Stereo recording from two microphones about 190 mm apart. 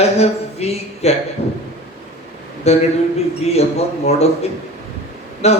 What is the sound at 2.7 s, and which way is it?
A man's voice, 35° left (ahead or behind).